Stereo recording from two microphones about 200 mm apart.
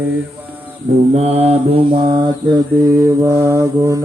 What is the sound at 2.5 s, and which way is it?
Mantra, 15° right (ahead or behind).